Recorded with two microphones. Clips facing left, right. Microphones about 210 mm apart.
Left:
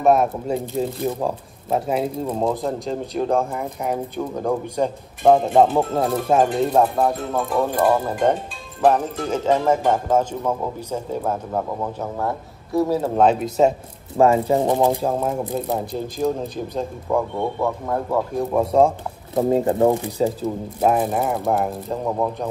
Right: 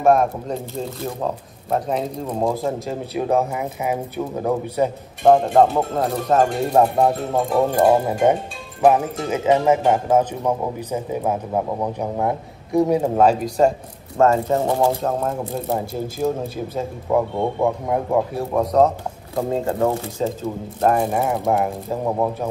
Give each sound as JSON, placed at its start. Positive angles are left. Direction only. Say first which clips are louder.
{"t": 0.0, "sound": "speech", "louder": "right 1 dB", "side_deg": 5}
{"t": 6.6, "sound": "speech", "louder": "right 1 dB", "side_deg": -10}
{"t": 7.0, "sound": "speech", "louder": "right 2 dB", "side_deg": -25}
{"t": 8.1, "sound": "speech", "louder": "right 2 dB", "side_deg": -10}
{"t": 13.1, "sound": "speech", "louder": "right 1 dB", "side_deg": 0}
{"t": 17.4, "sound": "speech", "louder": "right 3 dB", "side_deg": -15}
{"t": 18.4, "sound": "speech", "louder": "left 1 dB", "side_deg": 5}
{"t": 18.9, "sound": "speech", "louder": "even", "side_deg": 20}
{"t": 20.8, "sound": "speech", "louder": "right 1 dB", "side_deg": 0}